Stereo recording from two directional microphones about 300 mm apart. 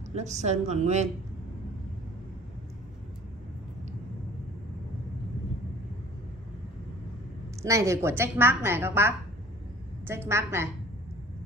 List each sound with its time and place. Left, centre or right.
0.1 s a woman's voice: right
7.6 s a woman's voice: centre